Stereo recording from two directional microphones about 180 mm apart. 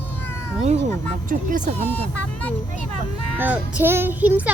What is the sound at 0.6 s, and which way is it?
Speech, 40° right (ahead or behind).